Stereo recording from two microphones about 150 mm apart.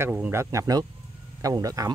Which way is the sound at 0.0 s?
15° right (ahead or behind).